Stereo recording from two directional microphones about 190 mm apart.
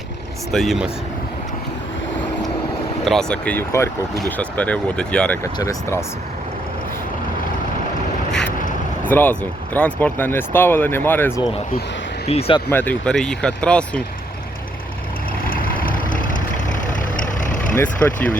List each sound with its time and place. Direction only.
0.5 s speech: centre (ahead or behind)
3.0 s speech: centre (ahead or behind)
5.4 s speech: 15° left (ahead or behind)
8.3 s vehicle: 5° left (ahead or behind)
9.0 s speech: 10° left (ahead or behind)
12.3 s speech: 30° left (ahead or behind)
12.7 s speech: 10° left (ahead or behind)
15.4 s vehicle: 50° left (ahead or behind)